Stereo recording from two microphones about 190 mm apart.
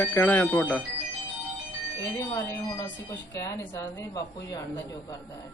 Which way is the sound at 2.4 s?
15° left (ahead or behind).